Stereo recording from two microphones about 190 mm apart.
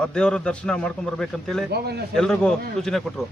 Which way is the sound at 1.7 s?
60° right (ahead or behind).